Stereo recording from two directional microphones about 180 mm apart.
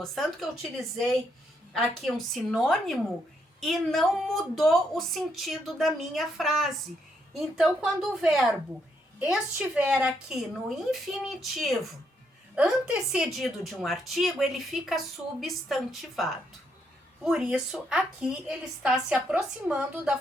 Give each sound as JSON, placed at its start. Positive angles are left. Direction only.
{"t": 0.0, "sound": "a woman's voice", "side_deg": 5}